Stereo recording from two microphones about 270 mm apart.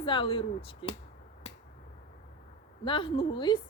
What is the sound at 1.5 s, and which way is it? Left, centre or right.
Finger snapping, left.